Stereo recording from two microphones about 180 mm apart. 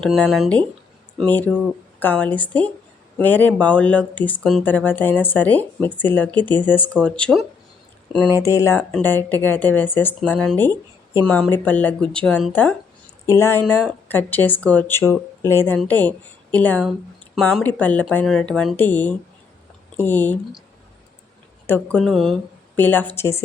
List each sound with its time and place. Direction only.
0.0 s speech: centre (ahead or behind)
8.4 s speech: 15° left (ahead or behind)
13.2 s a woman's voice: 15° left (ahead or behind)
21.7 s speech: 5° left (ahead or behind)